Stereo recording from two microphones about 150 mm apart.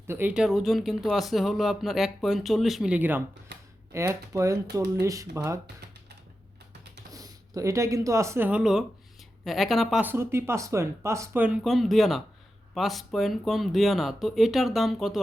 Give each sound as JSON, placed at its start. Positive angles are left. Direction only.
{"t": 0.1, "sound": "speech", "side_deg": -10}
{"t": 7.1, "sound": "speech", "side_deg": -25}
{"t": 10.0, "sound": "speech", "side_deg": -15}
{"t": 11.4, "sound": "speech", "side_deg": -5}